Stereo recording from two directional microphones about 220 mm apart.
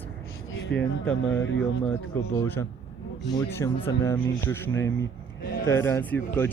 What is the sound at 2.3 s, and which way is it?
Speech, 10° left (ahead or behind).